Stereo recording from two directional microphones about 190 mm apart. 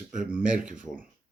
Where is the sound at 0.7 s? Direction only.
45° right (ahead or behind).